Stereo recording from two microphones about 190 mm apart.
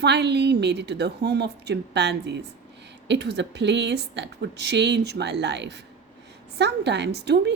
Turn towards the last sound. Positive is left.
turn(degrees=-65)  # may be behind; listen again after turning